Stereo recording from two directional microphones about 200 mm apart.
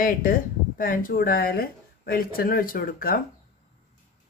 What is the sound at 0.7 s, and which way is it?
Speech, 45° left (ahead or behind).